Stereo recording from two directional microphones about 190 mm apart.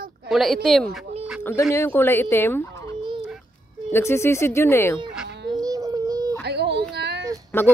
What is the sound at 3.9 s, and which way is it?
Speech, 15° left (ahead or behind).